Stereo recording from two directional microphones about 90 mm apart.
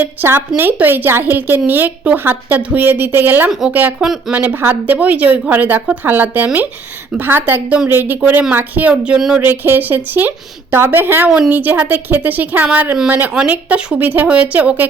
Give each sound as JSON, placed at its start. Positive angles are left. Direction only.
{"t": 0.0, "sound": "a woman's voice", "side_deg": -20}
{"t": 9.4, "sound": "a woman's voice", "side_deg": -25}